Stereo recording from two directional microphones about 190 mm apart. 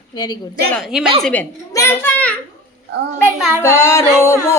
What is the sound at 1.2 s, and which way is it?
A woman's voice, 10° left (ahead or behind).